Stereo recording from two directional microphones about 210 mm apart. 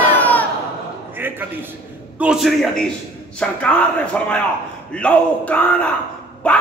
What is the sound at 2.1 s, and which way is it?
A man's voice, 5° right (ahead or behind).